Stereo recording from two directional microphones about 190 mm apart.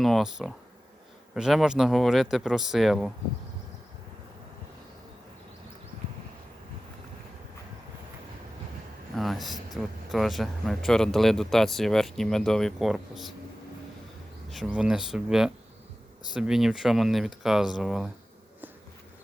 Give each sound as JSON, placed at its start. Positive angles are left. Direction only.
{"t": 0.0, "sound": "speech", "side_deg": 0}
{"t": 9.1, "sound": "speech", "side_deg": 0}
{"t": 14.5, "sound": "speech", "side_deg": 0}